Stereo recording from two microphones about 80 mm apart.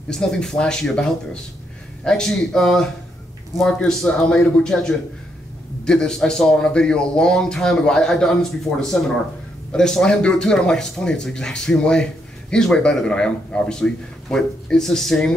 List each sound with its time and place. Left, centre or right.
0.1 s speech: centre